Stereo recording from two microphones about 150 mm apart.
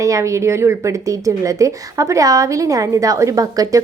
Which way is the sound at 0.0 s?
20° right (ahead or behind).